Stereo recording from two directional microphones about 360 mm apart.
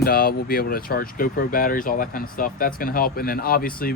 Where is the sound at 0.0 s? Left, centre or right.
Left.